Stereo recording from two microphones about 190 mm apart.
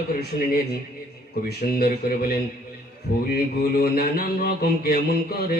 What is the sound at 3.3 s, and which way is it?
Mantra, 55° left (ahead or behind).